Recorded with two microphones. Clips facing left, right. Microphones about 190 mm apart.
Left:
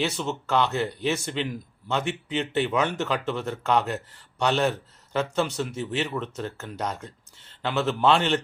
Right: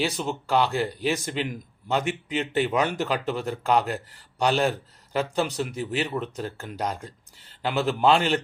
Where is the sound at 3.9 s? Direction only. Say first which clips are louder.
Even; 35° right (ahead or behind).